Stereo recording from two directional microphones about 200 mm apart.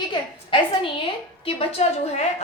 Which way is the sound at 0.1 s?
25° left (ahead or behind).